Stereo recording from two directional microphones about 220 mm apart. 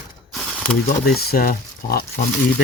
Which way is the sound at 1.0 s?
45° left (ahead or behind).